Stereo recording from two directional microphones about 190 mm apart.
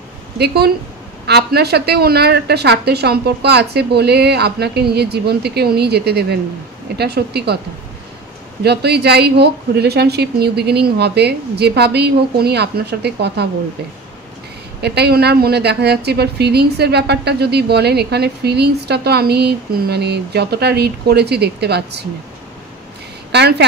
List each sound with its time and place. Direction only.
1.2 s a woman's voice: 60° right (ahead or behind)
8.6 s a woman's voice: 60° right (ahead or behind)
14.8 s a woman's voice: 60° right (ahead or behind)
23.3 s a woman's voice: 60° right (ahead or behind)